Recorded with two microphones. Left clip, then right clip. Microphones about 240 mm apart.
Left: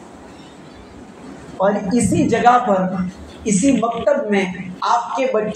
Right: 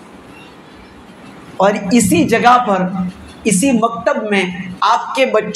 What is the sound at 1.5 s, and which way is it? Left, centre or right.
A woman's voice, right.